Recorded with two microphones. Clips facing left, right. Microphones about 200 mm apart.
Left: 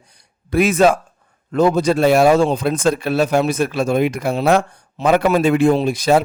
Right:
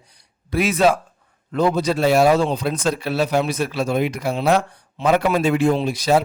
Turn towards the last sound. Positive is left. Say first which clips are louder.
# left 3 dB
turn(degrees=50)  # may be behind; listen again after turning